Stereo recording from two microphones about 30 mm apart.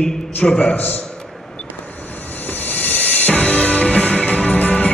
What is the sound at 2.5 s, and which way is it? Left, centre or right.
Music, left.